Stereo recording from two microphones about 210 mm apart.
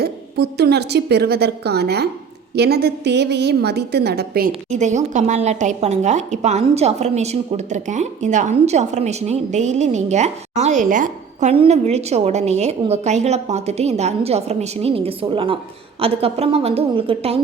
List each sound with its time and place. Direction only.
0.0 s a woman's voice: 50° right (ahead or behind); by 17.4 s 25° right (ahead or behind)